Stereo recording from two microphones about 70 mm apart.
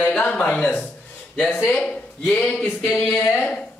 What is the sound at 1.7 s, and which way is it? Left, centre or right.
Speech, centre.